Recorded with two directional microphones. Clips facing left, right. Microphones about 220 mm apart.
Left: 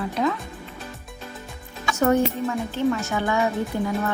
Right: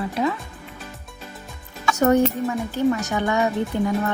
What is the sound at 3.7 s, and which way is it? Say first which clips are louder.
Speech: right 3 dB; 70° right (ahead or behind).